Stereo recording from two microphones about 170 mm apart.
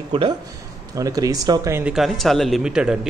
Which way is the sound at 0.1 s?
30° right (ahead or behind).